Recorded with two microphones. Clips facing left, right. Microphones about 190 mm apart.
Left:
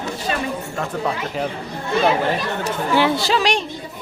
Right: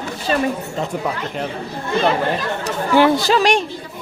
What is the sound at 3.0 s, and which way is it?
Speech, 45° right (ahead or behind).